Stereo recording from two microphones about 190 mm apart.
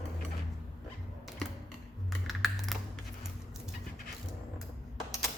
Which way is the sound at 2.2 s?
Centre (ahead or behind).